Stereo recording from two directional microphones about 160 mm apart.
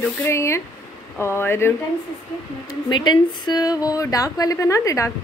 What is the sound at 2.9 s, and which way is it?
A woman's voice, 30° left (ahead or behind).